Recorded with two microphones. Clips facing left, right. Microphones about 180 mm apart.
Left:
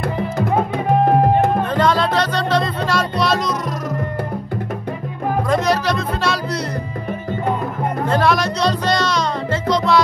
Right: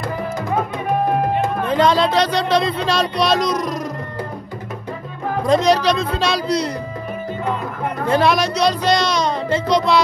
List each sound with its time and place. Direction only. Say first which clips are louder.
1.8 s speech: right 4 dB; 15° right (ahead or behind)
5.5 s speech: right 5 dB; 15° right (ahead or behind)
8.1 s speech: right 2 dB; 15° right (ahead or behind)